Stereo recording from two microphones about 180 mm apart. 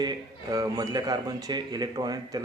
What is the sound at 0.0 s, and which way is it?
Speech, 20° right (ahead or behind).